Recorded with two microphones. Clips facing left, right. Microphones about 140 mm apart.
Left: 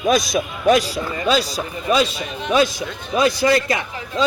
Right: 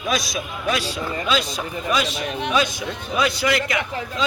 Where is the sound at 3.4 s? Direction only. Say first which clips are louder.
Left 4 dB; 30° left (ahead or behind).